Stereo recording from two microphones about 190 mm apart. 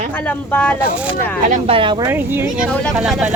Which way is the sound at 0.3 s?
10° left (ahead or behind).